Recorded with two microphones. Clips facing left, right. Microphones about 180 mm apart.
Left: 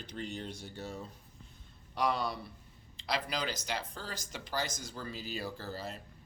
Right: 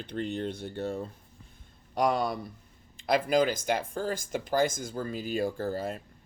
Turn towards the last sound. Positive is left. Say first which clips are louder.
# right 9 dB
turn(degrees=-50)  # may be behind; listen again after turning